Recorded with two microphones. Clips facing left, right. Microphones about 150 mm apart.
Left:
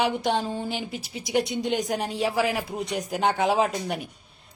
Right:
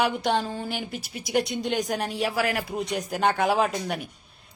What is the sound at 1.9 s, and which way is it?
Speech, 20° left (ahead or behind).